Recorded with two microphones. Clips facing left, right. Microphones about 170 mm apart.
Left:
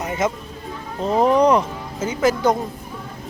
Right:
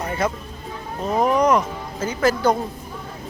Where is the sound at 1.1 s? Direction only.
30° left (ahead or behind).